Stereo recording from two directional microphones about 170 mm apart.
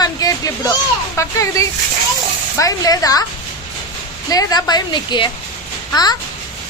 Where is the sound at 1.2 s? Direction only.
20° left (ahead or behind).